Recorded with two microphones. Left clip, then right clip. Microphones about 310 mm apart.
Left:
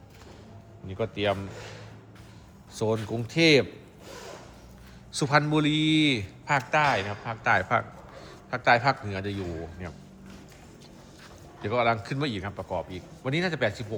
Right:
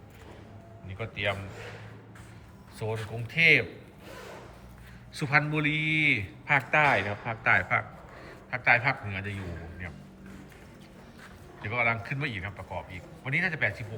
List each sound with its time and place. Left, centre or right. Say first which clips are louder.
0.9 s speech: left 4 dB; centre
3.3 s a man's voice: even; centre
5.1 s a man's voice: left 3 dB; centre
11.6 s a man's voice: left 3 dB; centre
12.4 s a man's voice: left 5 dB; left
13.3 s a man's voice: even; centre